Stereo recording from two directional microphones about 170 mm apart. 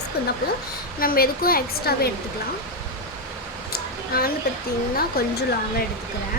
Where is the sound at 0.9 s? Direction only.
60° left (ahead or behind).